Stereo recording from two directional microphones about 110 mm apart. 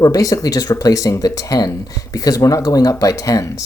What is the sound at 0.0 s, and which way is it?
Speech, 35° left (ahead or behind).